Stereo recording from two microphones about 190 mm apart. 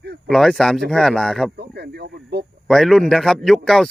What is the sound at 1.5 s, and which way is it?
Speech, 60° right (ahead or behind).